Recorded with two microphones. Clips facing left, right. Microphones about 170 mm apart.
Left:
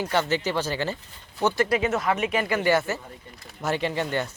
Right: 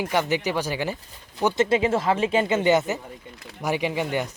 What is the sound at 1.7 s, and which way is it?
Speech, 30° right (ahead or behind).